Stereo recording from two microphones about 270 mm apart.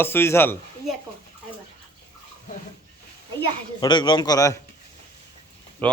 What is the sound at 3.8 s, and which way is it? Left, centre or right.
Speech, centre.